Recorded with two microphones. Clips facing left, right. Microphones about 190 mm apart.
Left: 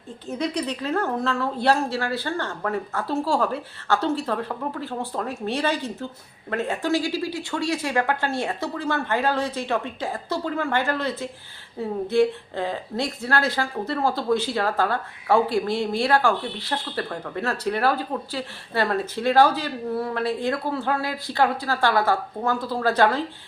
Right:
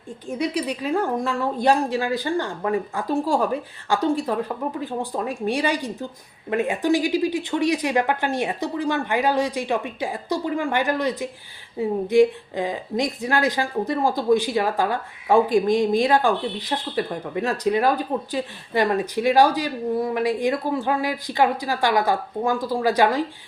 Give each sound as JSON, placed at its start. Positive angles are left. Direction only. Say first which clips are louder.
{"t": 0.3, "sound": "a woman's voice", "louder": "right 2 dB", "side_deg": -10}